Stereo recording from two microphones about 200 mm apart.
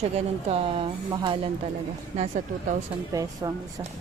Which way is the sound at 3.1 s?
15° right (ahead or behind).